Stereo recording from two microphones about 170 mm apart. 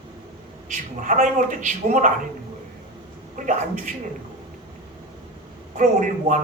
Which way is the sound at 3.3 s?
50° right (ahead or behind).